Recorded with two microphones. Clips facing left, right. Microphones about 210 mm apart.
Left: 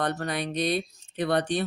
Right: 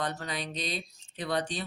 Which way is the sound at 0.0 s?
60° left (ahead or behind).